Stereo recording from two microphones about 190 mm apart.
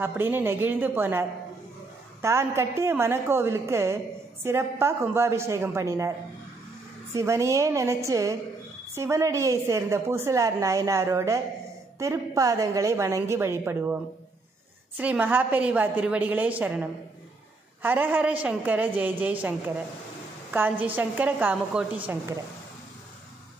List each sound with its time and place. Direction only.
0.0 s a woman's voice: 10° right (ahead or behind)
2.2 s a woman's voice: 15° right (ahead or behind)
7.2 s a woman's voice: 15° right (ahead or behind)
15.0 s a woman's voice: 10° right (ahead or behind)